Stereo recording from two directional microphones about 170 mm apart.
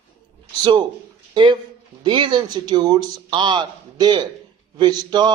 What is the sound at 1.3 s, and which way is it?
Speech, 25° right (ahead or behind).